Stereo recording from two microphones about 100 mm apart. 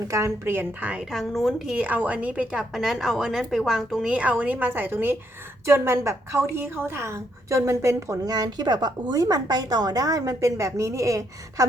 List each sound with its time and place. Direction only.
0.1 s a woman's voice: 30° right (ahead or behind)
1.1 s a woman's voice: centre (ahead or behind); by 11.6 s 35° right (ahead or behind)